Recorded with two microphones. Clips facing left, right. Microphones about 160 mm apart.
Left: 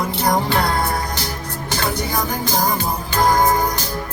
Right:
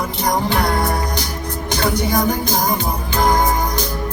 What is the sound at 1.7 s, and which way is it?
Music, 15° right (ahead or behind).